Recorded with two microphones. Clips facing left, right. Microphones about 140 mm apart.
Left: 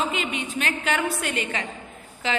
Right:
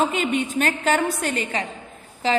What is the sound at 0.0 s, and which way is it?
A woman's voice, 45° right (ahead or behind).